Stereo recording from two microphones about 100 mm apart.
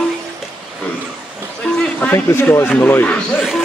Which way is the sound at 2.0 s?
20° left (ahead or behind).